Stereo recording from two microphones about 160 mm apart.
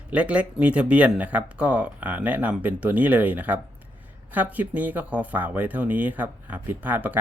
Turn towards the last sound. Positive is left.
turn(degrees=-10)  # may be behind; listen again after turning